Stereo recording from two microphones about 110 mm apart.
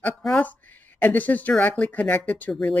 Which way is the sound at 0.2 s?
5° left (ahead or behind).